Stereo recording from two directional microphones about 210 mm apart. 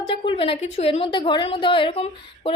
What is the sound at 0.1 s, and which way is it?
A woman's voice, 25° left (ahead or behind).